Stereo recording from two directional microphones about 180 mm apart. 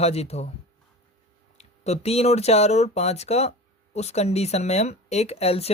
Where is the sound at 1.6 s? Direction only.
35° left (ahead or behind).